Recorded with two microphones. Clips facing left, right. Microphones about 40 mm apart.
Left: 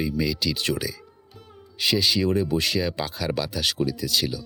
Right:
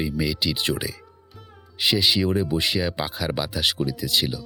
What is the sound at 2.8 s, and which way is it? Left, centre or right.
Speech, right.